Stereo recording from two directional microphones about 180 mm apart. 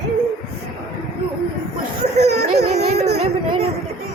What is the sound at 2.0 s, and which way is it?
Speech, 40° right (ahead or behind).